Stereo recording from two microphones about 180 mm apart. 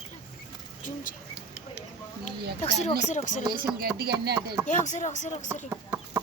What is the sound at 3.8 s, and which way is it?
Chopping, 60° right (ahead or behind).